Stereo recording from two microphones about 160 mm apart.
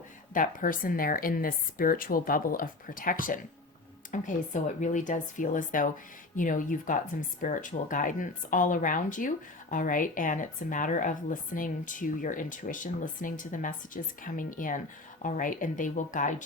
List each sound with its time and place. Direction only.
0.3 s speech: 60° left (ahead or behind)